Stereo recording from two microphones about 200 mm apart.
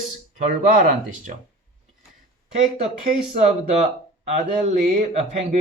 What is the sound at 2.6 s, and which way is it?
Speech, 30° right (ahead or behind).